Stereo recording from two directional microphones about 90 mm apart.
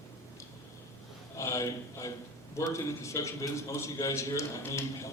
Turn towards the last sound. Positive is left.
turn(degrees=35)  # may be behind; listen again after turning